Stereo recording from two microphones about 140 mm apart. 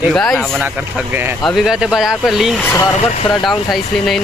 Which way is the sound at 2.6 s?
15° left (ahead or behind).